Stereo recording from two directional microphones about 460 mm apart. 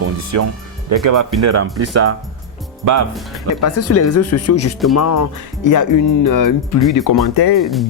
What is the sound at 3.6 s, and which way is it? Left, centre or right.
Speech, left.